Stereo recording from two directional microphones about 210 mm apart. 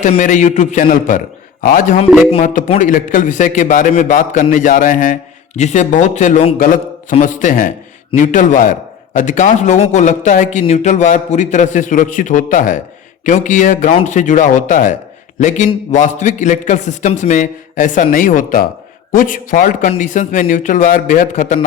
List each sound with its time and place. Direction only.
0.0 s a man's voice: 35° left (ahead or behind)